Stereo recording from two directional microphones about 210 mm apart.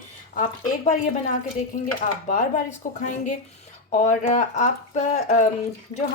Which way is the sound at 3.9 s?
35° left (ahead or behind).